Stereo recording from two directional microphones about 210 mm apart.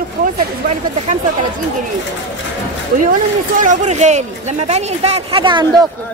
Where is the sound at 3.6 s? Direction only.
35° right (ahead or behind).